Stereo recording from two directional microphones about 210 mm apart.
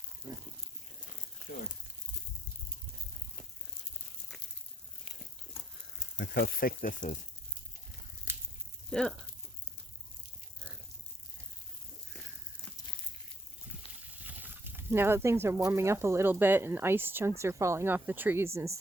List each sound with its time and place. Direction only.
1.5 s speech: 40° left (ahead or behind)
6.1 s speech: 50° left (ahead or behind)
8.3 s a sound: 10° right (ahead or behind)
8.9 s speech: 5° left (ahead or behind)
14.3 s speech: 10° right (ahead or behind)